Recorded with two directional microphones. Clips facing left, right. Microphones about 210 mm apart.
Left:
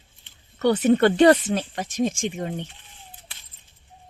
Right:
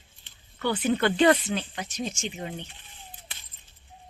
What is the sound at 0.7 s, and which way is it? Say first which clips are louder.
A woman's voice: left 6 dB; 40° left (ahead or behind).